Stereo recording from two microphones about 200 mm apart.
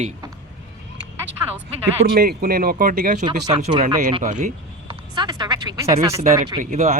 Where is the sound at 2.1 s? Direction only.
45° right (ahead or behind).